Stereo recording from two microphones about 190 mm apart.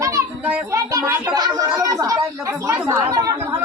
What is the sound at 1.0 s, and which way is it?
Speech, 5° right (ahead or behind).